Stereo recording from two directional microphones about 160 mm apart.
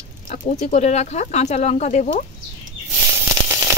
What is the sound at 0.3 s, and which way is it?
Speech, 45° left (ahead or behind).